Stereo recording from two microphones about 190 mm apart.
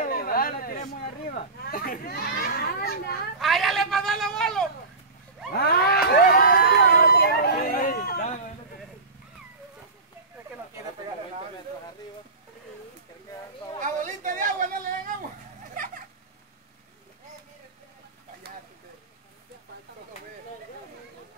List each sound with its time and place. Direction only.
0.0 s a sound: 50° left (ahead or behind)
1.6 s a child's voice: 50° left (ahead or behind)
3.3 s speech: centre (ahead or behind)
5.5 s vehicle: 55° left (ahead or behind)
13.8 s a sound: 45° right (ahead or behind)
15.7 s cat: 45° right (ahead or behind)